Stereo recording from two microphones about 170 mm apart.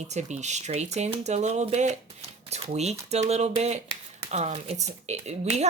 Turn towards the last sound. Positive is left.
turn(degrees=-40)  # may be behind; listen again after turning